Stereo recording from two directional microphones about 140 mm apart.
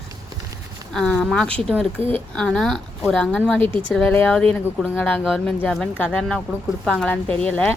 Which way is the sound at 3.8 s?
10° left (ahead or behind).